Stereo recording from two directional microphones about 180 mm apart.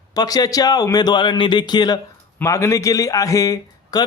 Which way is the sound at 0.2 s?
20° left (ahead or behind).